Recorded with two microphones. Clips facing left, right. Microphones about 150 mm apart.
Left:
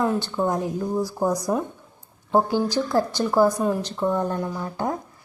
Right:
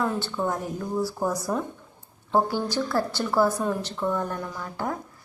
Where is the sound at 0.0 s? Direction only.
15° left (ahead or behind).